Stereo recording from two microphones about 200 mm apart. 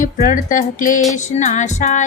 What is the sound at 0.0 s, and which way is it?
A woman's voice, 40° left (ahead or behind).